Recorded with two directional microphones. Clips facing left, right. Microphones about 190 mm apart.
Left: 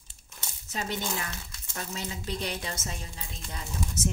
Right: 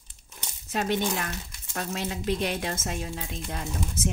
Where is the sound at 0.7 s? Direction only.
65° right (ahead or behind).